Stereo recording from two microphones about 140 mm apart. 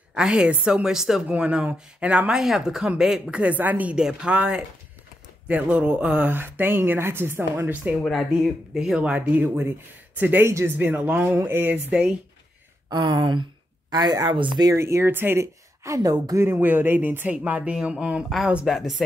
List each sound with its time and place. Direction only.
0.1 s speech: 5° right (ahead or behind)
7.9 s speech: centre (ahead or behind)
12.9 s speech: 30° right (ahead or behind); by 19.0 s centre (ahead or behind)